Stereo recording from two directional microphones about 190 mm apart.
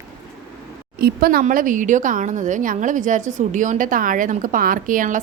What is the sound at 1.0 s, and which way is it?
A woman's voice, 55° right (ahead or behind).